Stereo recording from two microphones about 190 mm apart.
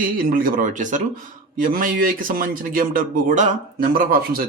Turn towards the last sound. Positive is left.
turn(degrees=-50)  # may be behind; listen again after turning